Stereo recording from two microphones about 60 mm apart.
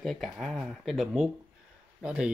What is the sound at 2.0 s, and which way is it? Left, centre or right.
Speech, centre.